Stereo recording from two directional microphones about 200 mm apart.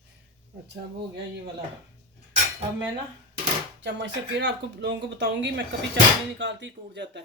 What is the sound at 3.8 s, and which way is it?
Speech, 60° right (ahead or behind).